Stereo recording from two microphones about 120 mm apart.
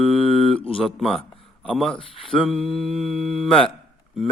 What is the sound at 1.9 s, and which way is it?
Speech, 50° left (ahead or behind).